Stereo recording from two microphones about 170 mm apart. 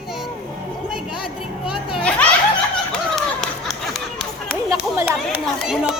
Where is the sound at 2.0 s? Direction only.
5° left (ahead or behind).